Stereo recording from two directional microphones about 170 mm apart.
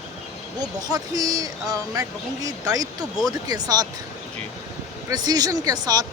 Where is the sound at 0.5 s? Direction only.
20° right (ahead or behind).